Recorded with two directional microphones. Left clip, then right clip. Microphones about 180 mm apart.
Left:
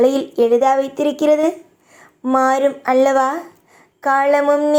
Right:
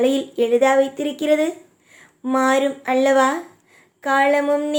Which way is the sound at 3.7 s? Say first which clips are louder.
Left 3 dB; 15° right (ahead or behind).